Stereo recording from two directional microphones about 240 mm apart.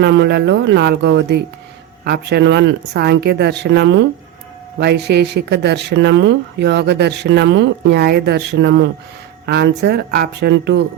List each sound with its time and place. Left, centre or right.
0.0 s speech: right